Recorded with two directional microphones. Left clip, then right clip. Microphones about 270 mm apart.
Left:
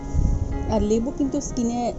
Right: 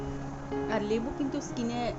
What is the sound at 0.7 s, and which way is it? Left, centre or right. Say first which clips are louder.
A woman's voice: left 9 dB; centre.